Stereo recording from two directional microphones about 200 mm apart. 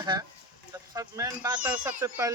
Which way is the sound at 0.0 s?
20° right (ahead or behind).